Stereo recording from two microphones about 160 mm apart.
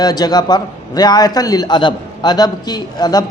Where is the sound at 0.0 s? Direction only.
25° left (ahead or behind).